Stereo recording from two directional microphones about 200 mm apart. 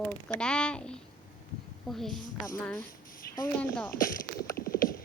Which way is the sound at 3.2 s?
50° left (ahead or behind).